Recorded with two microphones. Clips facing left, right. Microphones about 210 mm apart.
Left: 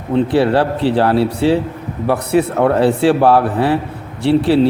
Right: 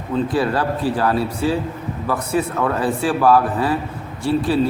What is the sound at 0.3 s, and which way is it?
Speech, 70° left (ahead or behind).